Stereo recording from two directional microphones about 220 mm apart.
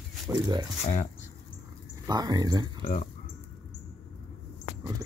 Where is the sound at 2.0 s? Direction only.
15° right (ahead or behind).